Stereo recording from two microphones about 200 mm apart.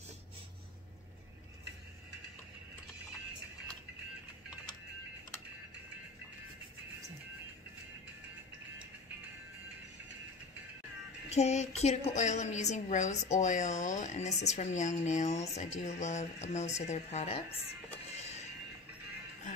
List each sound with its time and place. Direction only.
11.2 s a woman's voice: 35° left (ahead or behind)